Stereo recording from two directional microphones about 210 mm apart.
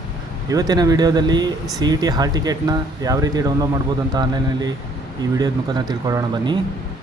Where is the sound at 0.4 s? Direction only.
15° right (ahead or behind).